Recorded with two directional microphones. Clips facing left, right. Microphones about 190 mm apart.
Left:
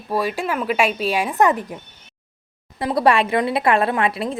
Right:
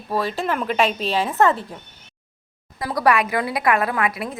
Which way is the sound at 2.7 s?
25° left (ahead or behind).